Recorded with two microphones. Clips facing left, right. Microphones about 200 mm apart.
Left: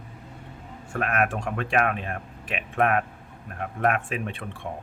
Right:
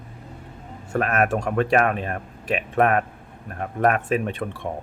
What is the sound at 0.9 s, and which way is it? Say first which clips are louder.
A man's voice: right 4 dB; 40° right (ahead or behind).